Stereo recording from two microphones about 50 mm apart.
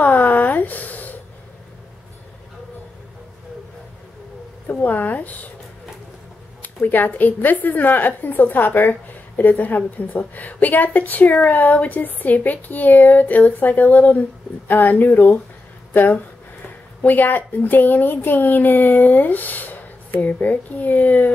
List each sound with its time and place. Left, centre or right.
0.0 s a sound: left
4.6 s a woman's voice: left
6.6 s a woman's voice: left